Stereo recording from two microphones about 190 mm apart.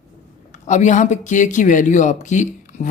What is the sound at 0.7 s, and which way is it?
Speech, 40° left (ahead or behind).